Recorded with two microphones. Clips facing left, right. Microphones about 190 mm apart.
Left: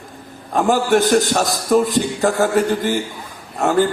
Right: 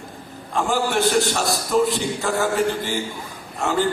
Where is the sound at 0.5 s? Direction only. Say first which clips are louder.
Left 7 dB; 45° left (ahead or behind).